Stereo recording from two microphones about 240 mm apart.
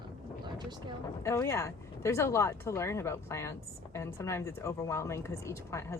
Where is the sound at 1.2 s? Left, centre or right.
Centre.